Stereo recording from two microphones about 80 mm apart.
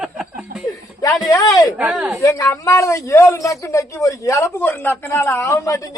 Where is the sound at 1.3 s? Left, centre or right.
Left.